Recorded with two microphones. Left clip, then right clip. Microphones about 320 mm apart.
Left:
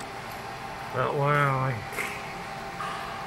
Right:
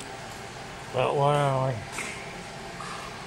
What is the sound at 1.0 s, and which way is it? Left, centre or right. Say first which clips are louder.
Speech: right 1 dB; right.